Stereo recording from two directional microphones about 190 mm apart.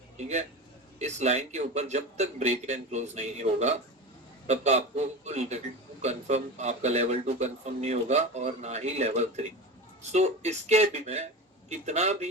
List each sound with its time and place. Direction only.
0.9 s speech: 35° right (ahead or behind)